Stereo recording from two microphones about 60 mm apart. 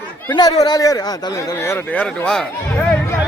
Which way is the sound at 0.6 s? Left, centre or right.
Left.